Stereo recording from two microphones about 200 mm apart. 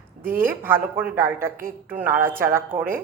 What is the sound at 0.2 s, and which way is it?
A woman's voice, 10° right (ahead or behind).